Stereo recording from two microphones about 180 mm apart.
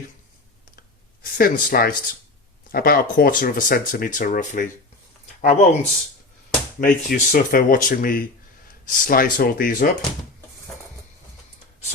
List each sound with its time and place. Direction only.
1.4 s speech: 55° left (ahead or behind); by 5.9 s 40° left (ahead or behind)
6.7 s speech: 50° left (ahead or behind)